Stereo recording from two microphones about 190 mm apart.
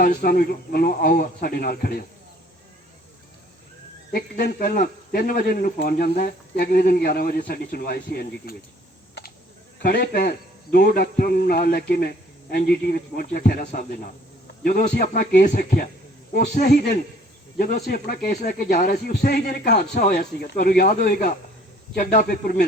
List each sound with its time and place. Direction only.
0.0 s speech: 45° left (ahead or behind)
4.1 s speech: 45° left (ahead or behind)
9.8 s speech: 55° left (ahead or behind)